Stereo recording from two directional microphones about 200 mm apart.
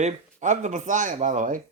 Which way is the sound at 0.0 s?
35° right (ahead or behind).